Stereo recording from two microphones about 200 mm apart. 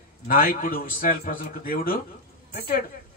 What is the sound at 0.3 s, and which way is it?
A man's voice, 45° left (ahead or behind).